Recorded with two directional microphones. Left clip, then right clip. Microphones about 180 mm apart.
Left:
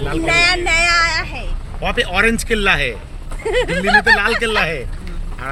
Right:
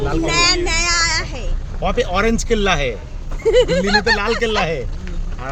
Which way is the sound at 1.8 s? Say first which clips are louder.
Left 2 dB; 15° right (ahead or behind).